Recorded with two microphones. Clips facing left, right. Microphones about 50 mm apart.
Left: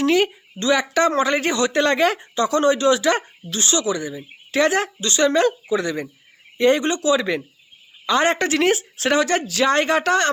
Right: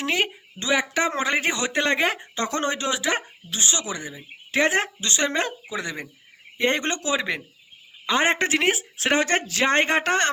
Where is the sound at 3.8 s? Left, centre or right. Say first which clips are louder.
Left 8 dB; right.